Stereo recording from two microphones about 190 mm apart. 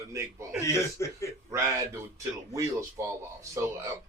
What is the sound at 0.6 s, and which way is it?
Speech, 15° left (ahead or behind).